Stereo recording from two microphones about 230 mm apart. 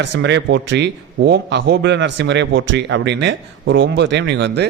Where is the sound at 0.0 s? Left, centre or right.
Right.